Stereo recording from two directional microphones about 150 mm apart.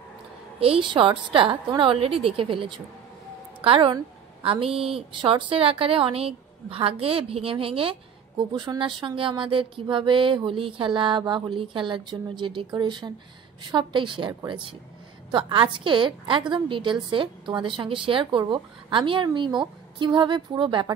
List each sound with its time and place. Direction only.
0.6 s a woman's voice: 35° right (ahead or behind)